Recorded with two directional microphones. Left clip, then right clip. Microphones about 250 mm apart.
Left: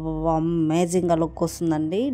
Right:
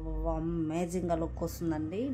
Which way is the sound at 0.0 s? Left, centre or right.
Left.